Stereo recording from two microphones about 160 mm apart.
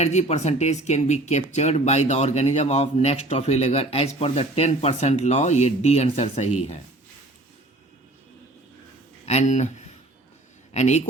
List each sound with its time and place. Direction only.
0.0 s speech: 45° left (ahead or behind)
9.2 s speech: 45° left (ahead or behind)